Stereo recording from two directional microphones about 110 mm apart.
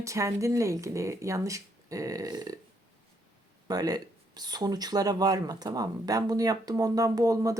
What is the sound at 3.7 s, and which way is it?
Speech, 35° right (ahead or behind).